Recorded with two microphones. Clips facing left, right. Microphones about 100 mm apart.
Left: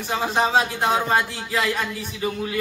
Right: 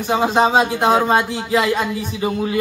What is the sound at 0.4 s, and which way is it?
A man's voice, 20° right (ahead or behind).